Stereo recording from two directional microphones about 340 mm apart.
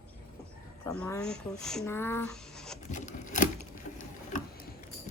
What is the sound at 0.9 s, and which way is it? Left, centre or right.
Speech, centre.